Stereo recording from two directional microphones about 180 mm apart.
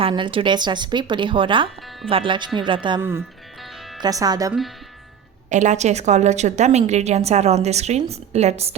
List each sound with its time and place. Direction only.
0.0 s speech: 30° right (ahead or behind)
3.0 s speech: 15° right (ahead or behind)
5.5 s a woman's voice: 40° right (ahead or behind)